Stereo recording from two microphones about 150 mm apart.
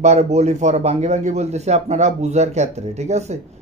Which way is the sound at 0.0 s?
50° right (ahead or behind).